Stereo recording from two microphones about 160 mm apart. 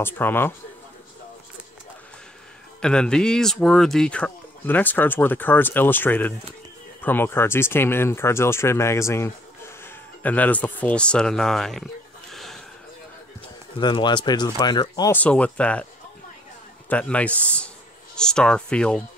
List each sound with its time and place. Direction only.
0.0 s speech: 15° left (ahead or behind)
2.8 s speech: 5° left (ahead or behind)
13.7 s speech: 30° left (ahead or behind)
15.1 s speech: 10° left (ahead or behind)
16.9 s speech: 10° left (ahead or behind)